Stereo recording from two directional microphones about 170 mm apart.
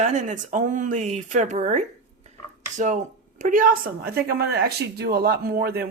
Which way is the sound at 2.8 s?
45° right (ahead or behind).